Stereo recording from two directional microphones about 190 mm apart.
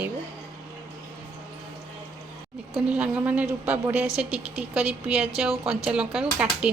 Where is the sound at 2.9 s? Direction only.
5° right (ahead or behind).